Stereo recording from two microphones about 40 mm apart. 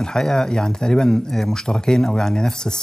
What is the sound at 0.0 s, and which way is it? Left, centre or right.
Speech, centre.